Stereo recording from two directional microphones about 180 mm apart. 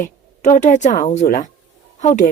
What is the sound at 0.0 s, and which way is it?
Speech, 45° left (ahead or behind).